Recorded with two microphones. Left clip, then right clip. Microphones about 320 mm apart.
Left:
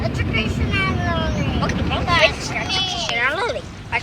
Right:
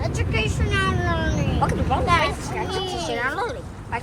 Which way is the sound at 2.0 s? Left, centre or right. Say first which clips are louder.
Left 6 dB; right.